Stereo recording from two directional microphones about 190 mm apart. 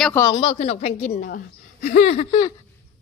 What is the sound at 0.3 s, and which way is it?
A woman's voice, 30° left (ahead or behind).